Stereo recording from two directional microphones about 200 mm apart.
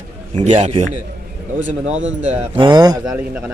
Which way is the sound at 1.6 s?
70° right (ahead or behind).